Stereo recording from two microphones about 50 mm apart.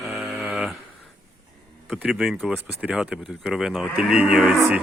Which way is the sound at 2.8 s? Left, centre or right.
Right.